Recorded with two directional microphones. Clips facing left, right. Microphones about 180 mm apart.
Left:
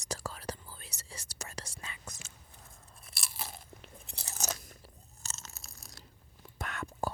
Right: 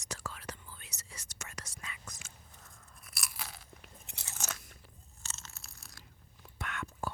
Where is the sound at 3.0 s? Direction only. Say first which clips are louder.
Left 2 dB; 30° left (ahead or behind).